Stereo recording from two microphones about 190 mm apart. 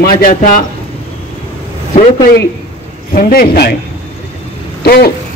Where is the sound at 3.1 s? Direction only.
50° left (ahead or behind).